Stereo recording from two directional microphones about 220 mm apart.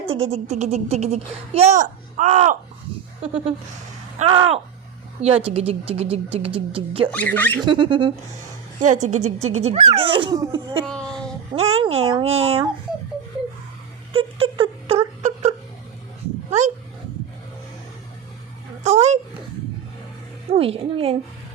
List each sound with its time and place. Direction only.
0.1 s a woman's voice: 25° right (ahead or behind)
4.2 s a woman's voice: 25° right (ahead or behind)
7.1 s speech: 5° left (ahead or behind)
7.6 s a woman's voice: 20° right (ahead or behind)
8.8 s a woman's voice: 35° right (ahead or behind); by 10.8 s 15° right (ahead or behind)
11.5 s a woman's voice: 30° right (ahead or behind)
14.1 s a sound: 25° right (ahead or behind)
16.5 s dog: 30° right (ahead or behind)
18.8 s a sound: 30° right (ahead or behind)
20.5 s a woman's voice: 25° right (ahead or behind)